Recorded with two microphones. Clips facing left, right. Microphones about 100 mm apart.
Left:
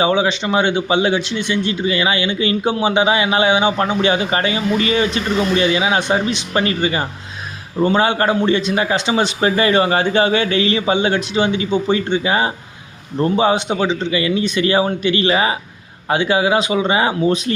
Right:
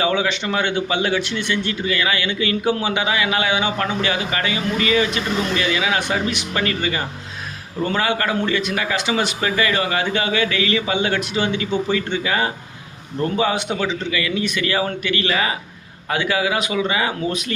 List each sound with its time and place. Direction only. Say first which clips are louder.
0.0 s a man's voice: left 4 dB; 20° left (ahead or behind)